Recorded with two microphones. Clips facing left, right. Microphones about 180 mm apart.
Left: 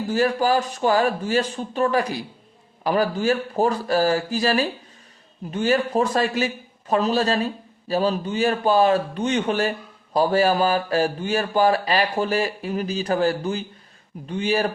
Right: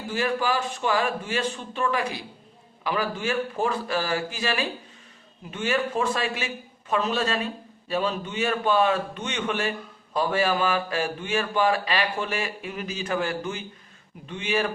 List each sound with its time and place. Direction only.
0.1 s a man's voice: 40° left (ahead or behind)